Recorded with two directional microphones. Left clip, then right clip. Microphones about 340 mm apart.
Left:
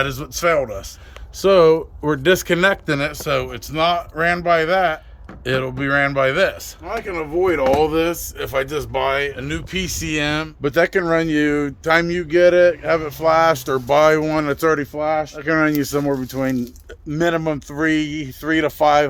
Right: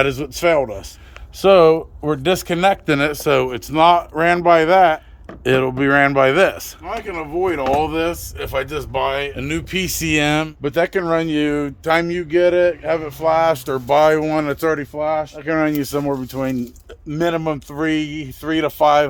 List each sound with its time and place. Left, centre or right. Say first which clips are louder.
0.0 s speech: right 3 dB; centre
9.3 s speech: right 3 dB; centre
10.6 s speech: left 1 dB; centre